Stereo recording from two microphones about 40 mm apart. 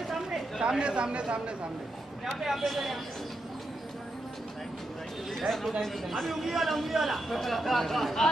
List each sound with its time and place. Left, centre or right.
0.3 s speech: centre
2.3 s a man's voice: centre
5.3 s a man's voice: centre